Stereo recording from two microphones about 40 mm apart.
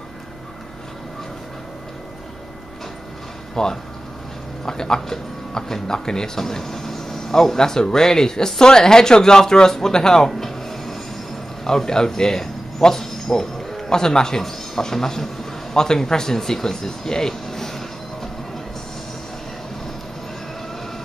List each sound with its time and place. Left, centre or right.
3.6 s a man's voice: centre